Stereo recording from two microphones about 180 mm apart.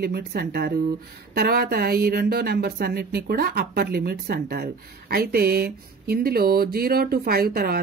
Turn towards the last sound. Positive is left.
turn(degrees=-55)  # may be behind; listen again after turning